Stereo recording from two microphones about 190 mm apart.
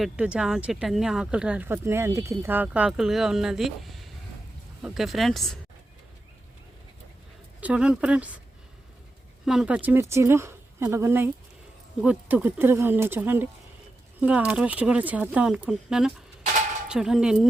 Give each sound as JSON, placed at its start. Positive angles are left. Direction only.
{"t": 0.0, "sound": "speech", "side_deg": -5}
{"t": 7.6, "sound": "speech", "side_deg": -5}
{"t": 9.5, "sound": "speech", "side_deg": -5}